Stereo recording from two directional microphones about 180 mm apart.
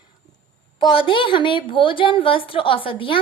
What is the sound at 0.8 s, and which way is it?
A woman's voice, 25° left (ahead or behind).